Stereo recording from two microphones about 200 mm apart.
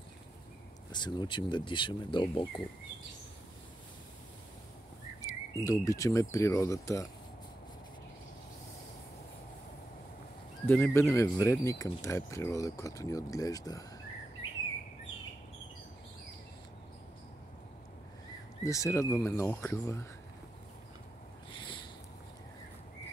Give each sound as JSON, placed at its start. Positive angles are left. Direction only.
{"t": 0.9, "sound": "speech", "side_deg": 20}
{"t": 5.2, "sound": "speech", "side_deg": 15}
{"t": 10.7, "sound": "speech", "side_deg": 10}
{"t": 18.6, "sound": "speech", "side_deg": 15}
{"t": 21.5, "sound": "a sound", "side_deg": 25}